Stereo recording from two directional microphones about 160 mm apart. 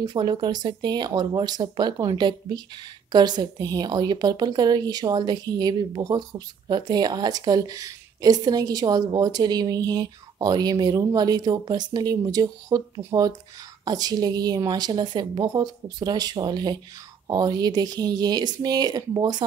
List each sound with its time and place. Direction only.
0.0 s speech: 25° right (ahead or behind)